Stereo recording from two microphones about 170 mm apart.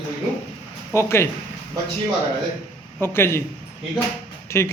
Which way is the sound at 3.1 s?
15° left (ahead or behind).